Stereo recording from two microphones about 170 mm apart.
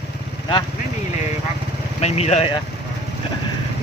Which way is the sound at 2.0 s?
40° left (ahead or behind).